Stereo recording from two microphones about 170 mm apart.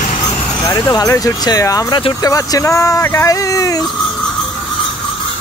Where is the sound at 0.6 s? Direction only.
15° left (ahead or behind).